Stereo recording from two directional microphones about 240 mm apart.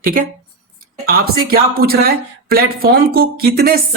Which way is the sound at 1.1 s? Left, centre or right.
Right.